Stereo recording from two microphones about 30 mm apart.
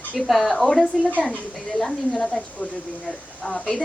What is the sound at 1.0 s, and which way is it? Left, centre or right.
A woman's voice, left.